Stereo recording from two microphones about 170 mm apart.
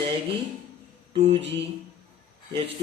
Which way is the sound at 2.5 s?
35° right (ahead or behind).